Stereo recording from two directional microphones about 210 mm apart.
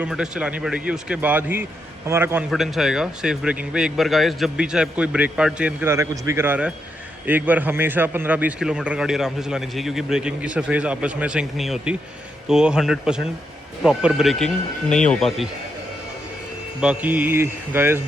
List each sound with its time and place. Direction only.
0.0 s a man's voice: 5° right (ahead or behind)
2.0 s mantra: 10° right (ahead or behind)
2.5 s a man's voice: centre (ahead or behind)
16.8 s mantra: 5° right (ahead or behind)